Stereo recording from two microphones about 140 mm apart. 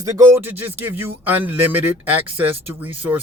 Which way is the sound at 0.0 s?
20° right (ahead or behind).